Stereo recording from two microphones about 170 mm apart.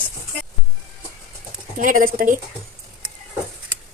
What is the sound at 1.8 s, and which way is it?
Speech, 55° right (ahead or behind).